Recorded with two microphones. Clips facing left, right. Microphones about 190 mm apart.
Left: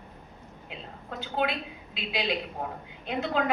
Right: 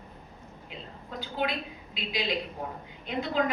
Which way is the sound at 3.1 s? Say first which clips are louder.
Even; 65° left (ahead or behind).